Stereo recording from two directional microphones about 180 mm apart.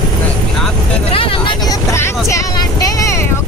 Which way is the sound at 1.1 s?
30° left (ahead or behind).